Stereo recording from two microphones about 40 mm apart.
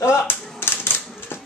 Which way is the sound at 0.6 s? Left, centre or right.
Left.